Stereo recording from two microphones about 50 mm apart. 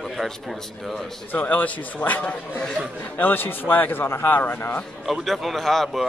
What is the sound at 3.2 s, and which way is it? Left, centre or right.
Speech, left.